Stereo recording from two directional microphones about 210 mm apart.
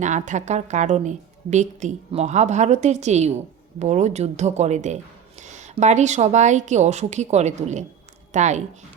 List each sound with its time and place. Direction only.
0.0 s a woman's voice: 35° right (ahead or behind)